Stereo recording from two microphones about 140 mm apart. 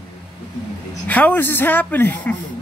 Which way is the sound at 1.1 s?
10° left (ahead or behind).